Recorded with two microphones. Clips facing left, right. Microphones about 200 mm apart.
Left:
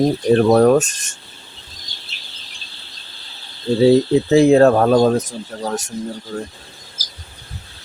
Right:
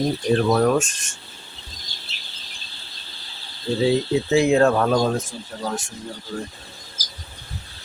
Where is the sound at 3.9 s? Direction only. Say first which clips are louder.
Left 7 dB; 35° left (ahead or behind).